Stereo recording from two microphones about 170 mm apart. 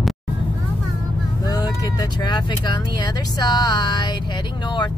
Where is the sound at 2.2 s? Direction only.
25° left (ahead or behind).